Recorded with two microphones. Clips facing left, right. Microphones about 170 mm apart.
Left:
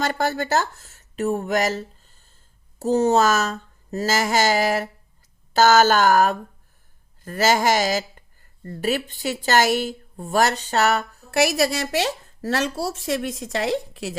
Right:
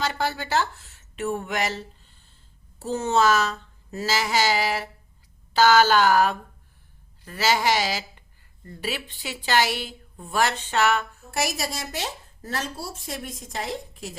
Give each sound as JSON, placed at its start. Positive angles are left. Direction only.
{"t": 0.0, "sound": "a woman's voice", "side_deg": 50}
{"t": 11.3, "sound": "a woman's voice", "side_deg": 70}